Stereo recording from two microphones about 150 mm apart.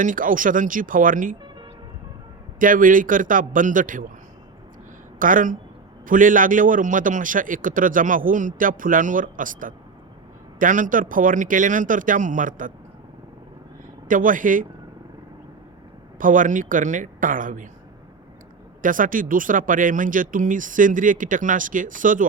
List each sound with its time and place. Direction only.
0.0 s a man's voice: 60° right (ahead or behind)
2.6 s a man's voice: 65° right (ahead or behind)
5.2 s a man's voice: 60° right (ahead or behind)
14.1 s a man's voice: 60° right (ahead or behind)
16.1 s a man's voice: 60° right (ahead or behind)
18.8 s a man's voice: 65° right (ahead or behind)